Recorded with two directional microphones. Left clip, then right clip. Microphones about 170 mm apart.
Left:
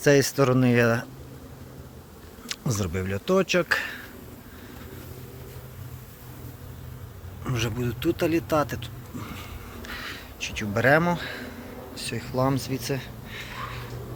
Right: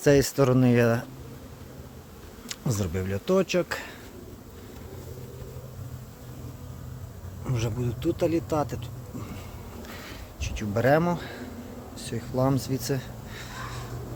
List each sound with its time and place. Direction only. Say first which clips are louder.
0.0 s speech: left 1 dB; 15° right (ahead or behind)
2.5 s speech: left 2 dB; 5° right (ahead or behind)
7.4 s speech: left 3 dB; 5° right (ahead or behind)
9.8 s a sound: left 7 dB; 10° right (ahead or behind)
11.9 s speech: left 1 dB; 15° right (ahead or behind)